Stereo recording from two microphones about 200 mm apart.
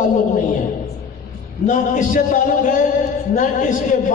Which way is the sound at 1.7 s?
40° left (ahead or behind).